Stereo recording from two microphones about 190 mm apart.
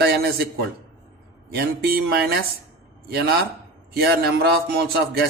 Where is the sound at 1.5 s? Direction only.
55° right (ahead or behind).